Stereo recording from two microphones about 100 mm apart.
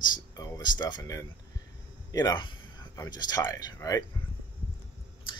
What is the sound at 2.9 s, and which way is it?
Speech, 35° left (ahead or behind).